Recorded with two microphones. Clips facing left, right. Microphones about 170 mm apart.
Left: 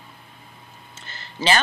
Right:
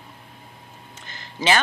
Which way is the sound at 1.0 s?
15° right (ahead or behind).